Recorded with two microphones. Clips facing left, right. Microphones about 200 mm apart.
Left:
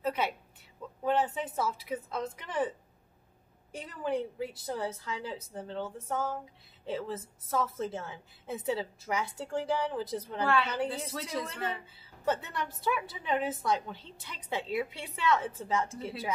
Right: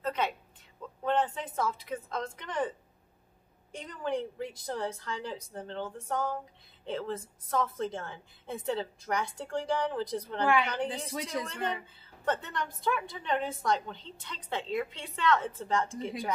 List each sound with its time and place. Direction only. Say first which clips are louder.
0.0 s a sound: even; 10° left (ahead or behind)
1.0 s a woman's voice: even; 10° left (ahead or behind)
3.7 s a woman's voice: left 1 dB; 5° left (ahead or behind)
10.4 s a woman's voice: right 1 dB; 15° right (ahead or behind)
11.8 s a woman's voice: left 1 dB; 5° left (ahead or behind)